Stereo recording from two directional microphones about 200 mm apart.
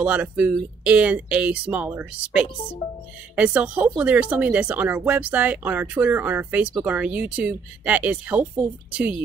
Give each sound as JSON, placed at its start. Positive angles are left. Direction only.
{"t": 0.0, "sound": "speech", "side_deg": -5}